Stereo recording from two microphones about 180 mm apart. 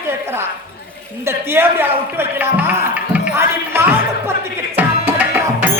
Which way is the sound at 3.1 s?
15° right (ahead or behind).